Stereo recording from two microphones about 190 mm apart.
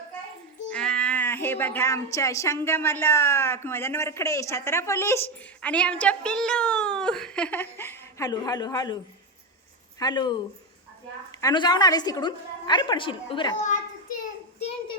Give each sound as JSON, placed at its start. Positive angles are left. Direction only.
{"t": 0.7, "sound": "a woman's voice", "side_deg": 5}
{"t": 10.0, "sound": "a woman's voice", "side_deg": 20}
{"t": 11.3, "sound": "a woman's voice", "side_deg": 20}